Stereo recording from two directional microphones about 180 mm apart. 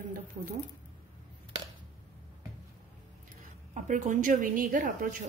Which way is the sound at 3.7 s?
45° right (ahead or behind).